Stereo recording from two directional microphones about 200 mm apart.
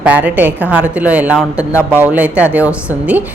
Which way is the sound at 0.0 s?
10° right (ahead or behind).